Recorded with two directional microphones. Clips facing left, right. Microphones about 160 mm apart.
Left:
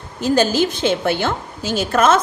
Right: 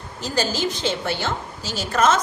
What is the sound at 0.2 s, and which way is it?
A woman's voice, 55° left (ahead or behind).